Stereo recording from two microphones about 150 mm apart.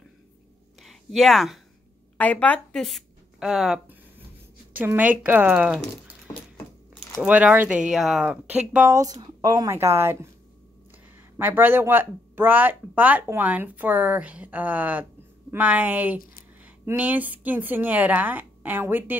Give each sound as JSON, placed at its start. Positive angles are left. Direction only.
{"t": 0.8, "sound": "a woman's voice", "side_deg": 0}
{"t": 7.2, "sound": "speech", "side_deg": -10}
{"t": 8.9, "sound": "a woman's voice", "side_deg": -25}
{"t": 11.3, "sound": "speech", "side_deg": -15}